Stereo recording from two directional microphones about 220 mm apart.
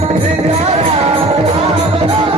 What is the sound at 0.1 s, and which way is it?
Music, 30° right (ahead or behind).